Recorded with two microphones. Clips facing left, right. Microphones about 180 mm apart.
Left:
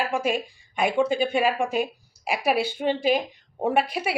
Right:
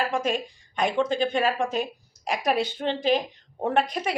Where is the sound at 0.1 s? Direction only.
10° left (ahead or behind).